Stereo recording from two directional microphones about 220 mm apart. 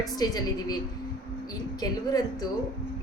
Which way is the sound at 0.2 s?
15° left (ahead or behind).